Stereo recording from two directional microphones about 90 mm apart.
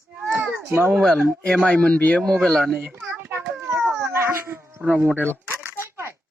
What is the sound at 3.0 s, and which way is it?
Children playing, 25° right (ahead or behind).